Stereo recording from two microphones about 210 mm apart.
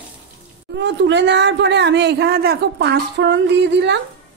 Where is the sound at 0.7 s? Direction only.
55° right (ahead or behind).